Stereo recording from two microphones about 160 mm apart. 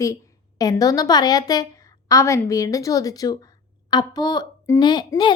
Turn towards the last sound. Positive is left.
turn(degrees=25)  # may be behind; listen again after turning